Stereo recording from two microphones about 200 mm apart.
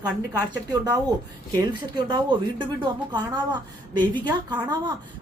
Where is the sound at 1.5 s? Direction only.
20° right (ahead or behind).